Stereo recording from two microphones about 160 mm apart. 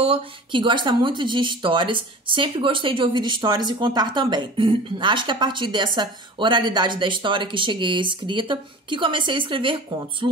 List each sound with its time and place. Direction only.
0.0 s speech: 35° right (ahead or behind)